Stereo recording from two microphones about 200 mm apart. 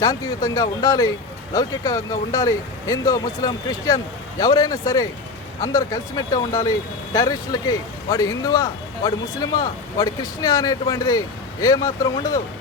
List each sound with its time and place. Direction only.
0.0 s speech: 20° left (ahead or behind)